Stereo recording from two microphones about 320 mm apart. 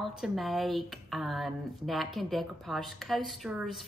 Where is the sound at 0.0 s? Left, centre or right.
Centre.